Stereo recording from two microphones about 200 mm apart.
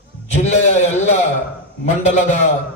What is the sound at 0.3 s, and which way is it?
A man's voice, 35° left (ahead or behind).